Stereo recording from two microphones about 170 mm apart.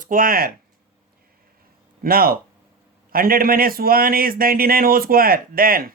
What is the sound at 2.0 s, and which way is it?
A man's voice, 60° right (ahead or behind).